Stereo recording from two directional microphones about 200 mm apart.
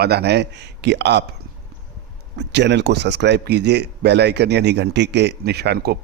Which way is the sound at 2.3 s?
60° right (ahead or behind).